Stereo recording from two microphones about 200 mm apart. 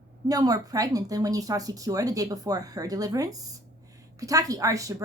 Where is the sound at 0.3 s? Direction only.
20° right (ahead or behind).